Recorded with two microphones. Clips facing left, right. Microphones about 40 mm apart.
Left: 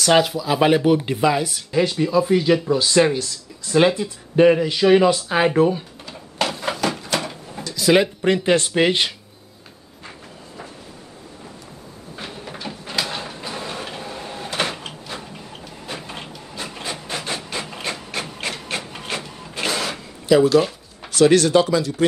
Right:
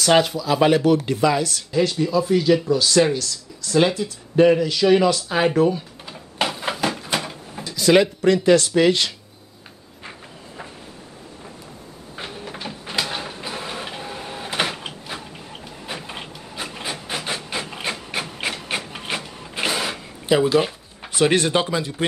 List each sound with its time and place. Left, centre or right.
0.0 s speech: centre
0.4 s speech: centre
6.3 s a sound: centre
7.2 s drawer open or close: centre
8.5 s speech: left
12.2 s cupboard open or close: centre
12.6 s a sound: centre
13.1 s printer: centre
20.2 s speech: centre